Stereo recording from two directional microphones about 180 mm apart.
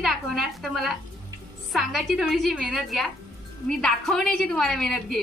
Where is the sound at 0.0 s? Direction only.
Centre (ahead or behind).